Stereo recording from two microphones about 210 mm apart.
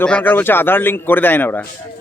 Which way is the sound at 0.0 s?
5° left (ahead or behind).